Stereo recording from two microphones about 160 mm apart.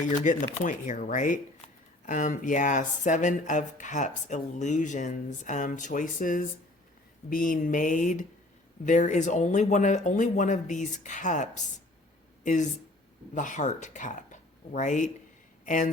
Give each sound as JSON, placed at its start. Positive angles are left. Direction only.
{"t": 0.1, "sound": "speech", "side_deg": 50}